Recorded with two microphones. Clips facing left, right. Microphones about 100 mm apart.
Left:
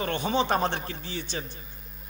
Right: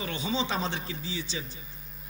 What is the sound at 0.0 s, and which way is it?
A man's voice, 55° left (ahead or behind).